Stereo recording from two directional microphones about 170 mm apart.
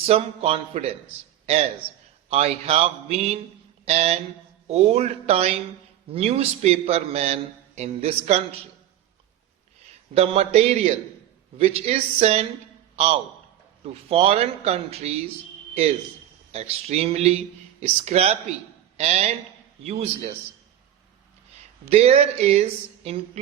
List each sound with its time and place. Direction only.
0.0 s speech: 35° right (ahead or behind)
10.2 s speech: 35° right (ahead or behind)
13.8 s speech: 35° right (ahead or behind)
16.5 s speech: 40° right (ahead or behind)
21.8 s speech: 40° right (ahead or behind)